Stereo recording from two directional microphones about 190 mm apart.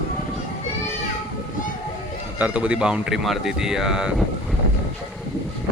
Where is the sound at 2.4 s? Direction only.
5° right (ahead or behind).